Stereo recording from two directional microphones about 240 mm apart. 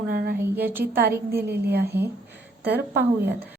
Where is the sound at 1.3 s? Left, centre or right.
Right.